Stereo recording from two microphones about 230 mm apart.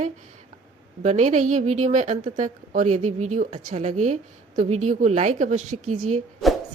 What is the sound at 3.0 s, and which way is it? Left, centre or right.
Speech, right.